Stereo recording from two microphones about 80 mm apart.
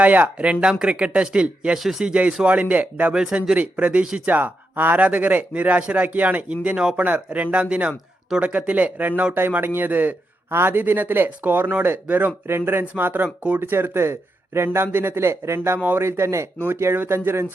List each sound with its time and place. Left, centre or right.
0.0 s speech: centre